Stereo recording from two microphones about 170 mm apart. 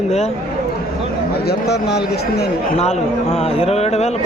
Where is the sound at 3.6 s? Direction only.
40° left (ahead or behind).